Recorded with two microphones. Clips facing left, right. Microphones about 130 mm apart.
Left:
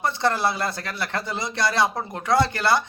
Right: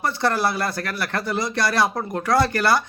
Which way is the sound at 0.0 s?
25° left (ahead or behind).